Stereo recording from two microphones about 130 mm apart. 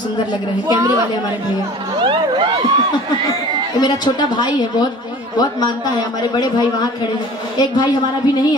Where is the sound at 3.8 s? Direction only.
35° left (ahead or behind).